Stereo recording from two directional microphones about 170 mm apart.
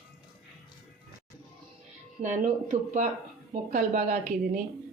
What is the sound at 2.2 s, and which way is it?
Speech, 45° right (ahead or behind).